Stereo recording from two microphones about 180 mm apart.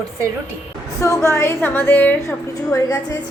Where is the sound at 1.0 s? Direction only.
15° left (ahead or behind).